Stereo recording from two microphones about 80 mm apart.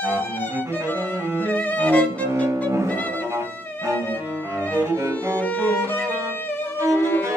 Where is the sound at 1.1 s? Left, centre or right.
Right.